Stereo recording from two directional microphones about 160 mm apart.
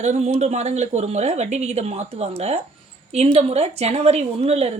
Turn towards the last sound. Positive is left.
turn(degrees=-40)  # may be behind; listen again after turning